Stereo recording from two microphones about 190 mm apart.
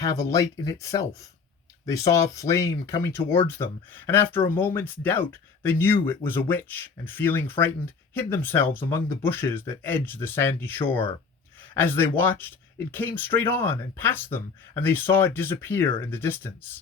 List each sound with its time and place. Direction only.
0.3 s speech: 15° left (ahead or behind)